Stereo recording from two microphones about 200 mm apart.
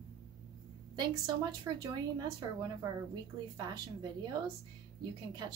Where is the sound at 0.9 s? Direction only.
20° right (ahead or behind).